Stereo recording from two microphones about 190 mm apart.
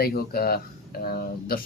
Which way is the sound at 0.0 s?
55° left (ahead or behind).